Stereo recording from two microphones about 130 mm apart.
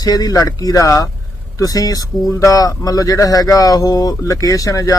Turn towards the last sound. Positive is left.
turn(degrees=25)  # may be behind; listen again after turning